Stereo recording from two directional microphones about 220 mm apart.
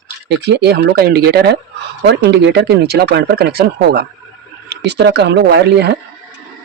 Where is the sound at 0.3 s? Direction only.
50° right (ahead or behind).